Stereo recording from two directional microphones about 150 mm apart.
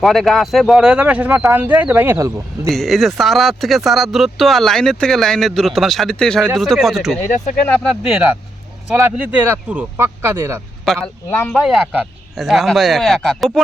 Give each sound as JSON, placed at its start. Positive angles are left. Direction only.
{"t": 0.0, "sound": "speech", "side_deg": 0}
{"t": 2.6, "sound": "speech", "side_deg": 0}
{"t": 8.0, "sound": "speech", "side_deg": -5}
{"t": 11.0, "sound": "speech", "side_deg": 15}
{"t": 11.5, "sound": "speech", "side_deg": 0}